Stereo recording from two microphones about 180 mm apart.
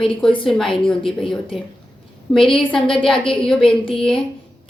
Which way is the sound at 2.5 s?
30° left (ahead or behind).